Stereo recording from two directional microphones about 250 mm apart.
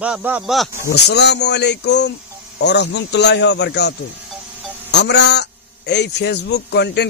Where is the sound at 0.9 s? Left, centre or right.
Left.